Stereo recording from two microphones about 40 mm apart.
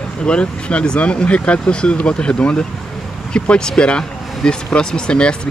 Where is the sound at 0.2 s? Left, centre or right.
Left.